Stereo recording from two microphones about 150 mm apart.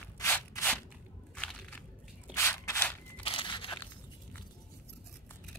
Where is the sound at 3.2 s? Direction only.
35° left (ahead or behind).